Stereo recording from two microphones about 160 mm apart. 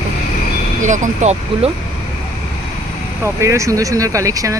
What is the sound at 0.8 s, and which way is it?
Speech, 45° right (ahead or behind).